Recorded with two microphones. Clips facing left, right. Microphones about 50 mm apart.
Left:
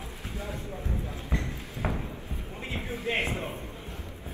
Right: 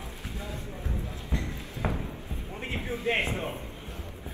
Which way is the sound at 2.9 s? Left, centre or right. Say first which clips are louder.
Right 2 dB; right.